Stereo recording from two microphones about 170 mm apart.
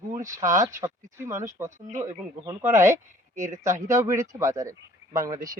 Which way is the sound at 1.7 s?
45° right (ahead or behind).